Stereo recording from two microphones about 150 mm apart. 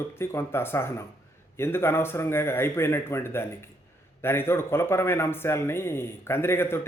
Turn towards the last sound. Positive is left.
turn(degrees=15)  # may be behind; listen again after turning